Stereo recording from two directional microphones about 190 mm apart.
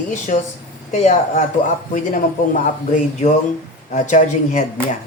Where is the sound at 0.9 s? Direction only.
35° left (ahead or behind).